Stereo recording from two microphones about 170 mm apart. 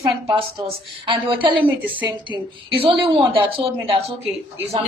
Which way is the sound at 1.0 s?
30° right (ahead or behind).